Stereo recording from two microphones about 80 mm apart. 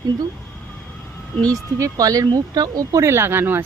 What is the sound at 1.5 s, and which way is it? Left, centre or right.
Speech, right.